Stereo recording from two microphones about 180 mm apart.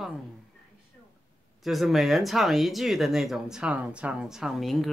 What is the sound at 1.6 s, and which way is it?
Speech, centre (ahead or behind).